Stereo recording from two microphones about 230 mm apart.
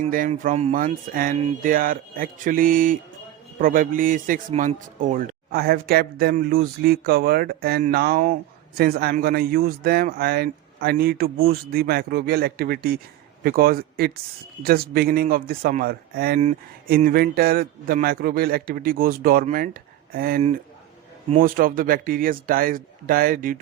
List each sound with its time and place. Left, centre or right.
0.0 s a man's voice: right